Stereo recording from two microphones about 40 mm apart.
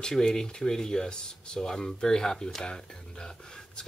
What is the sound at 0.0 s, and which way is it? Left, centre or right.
Speech, centre.